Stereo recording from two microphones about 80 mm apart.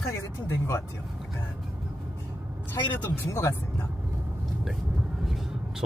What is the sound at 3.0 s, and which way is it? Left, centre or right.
Speech, left.